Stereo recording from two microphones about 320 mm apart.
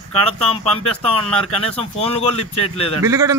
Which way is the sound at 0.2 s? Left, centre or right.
Centre.